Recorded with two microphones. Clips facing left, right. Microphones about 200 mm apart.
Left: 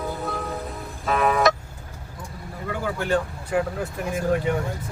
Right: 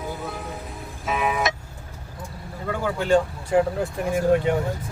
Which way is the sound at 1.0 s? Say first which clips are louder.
Left 4 dB; 5° right (ahead or behind).